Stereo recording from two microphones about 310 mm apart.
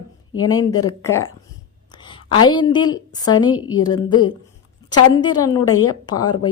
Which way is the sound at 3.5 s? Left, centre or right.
Left.